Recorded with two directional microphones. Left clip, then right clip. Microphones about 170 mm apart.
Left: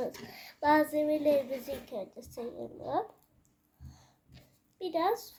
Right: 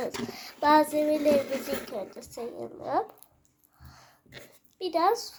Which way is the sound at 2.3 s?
10° right (ahead or behind).